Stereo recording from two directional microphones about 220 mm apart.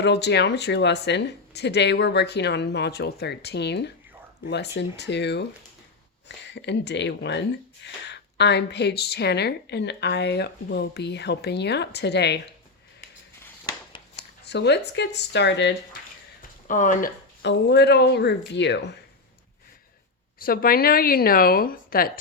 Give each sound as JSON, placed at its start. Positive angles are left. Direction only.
{"t": 0.0, "sound": "speech", "side_deg": 50}
{"t": 13.4, "sound": "a sound", "side_deg": 15}
{"t": 14.2, "sound": "speech", "side_deg": 50}
{"t": 16.6, "sound": "speech", "side_deg": 35}
{"t": 17.4, "sound": "speech", "side_deg": 50}
{"t": 20.4, "sound": "speech", "side_deg": 40}